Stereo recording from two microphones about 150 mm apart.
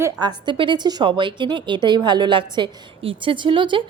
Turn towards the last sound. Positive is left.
turn(degrees=-35)  # may be behind; listen again after turning